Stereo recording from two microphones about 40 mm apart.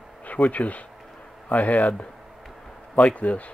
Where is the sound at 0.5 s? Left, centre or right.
Left.